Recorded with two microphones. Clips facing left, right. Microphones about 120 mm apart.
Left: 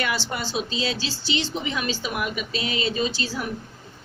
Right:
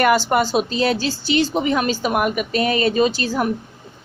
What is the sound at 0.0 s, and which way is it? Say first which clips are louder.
A woman's voice: right 12 dB; 50° right (ahead or behind).